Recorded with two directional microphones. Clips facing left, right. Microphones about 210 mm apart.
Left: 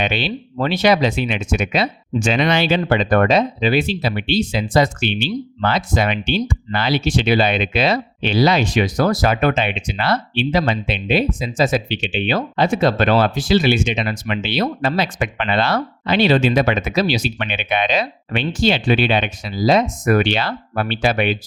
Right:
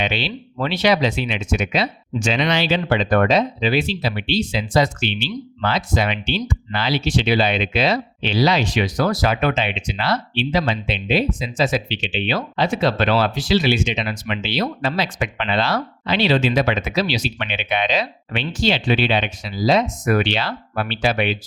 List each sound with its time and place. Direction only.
0.0 s speech: 50° left (ahead or behind)